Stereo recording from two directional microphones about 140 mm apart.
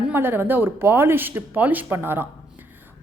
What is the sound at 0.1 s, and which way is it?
A woman's voice, 15° right (ahead or behind).